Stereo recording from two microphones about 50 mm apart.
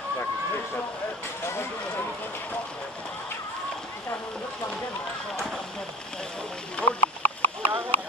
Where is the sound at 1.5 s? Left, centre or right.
Left.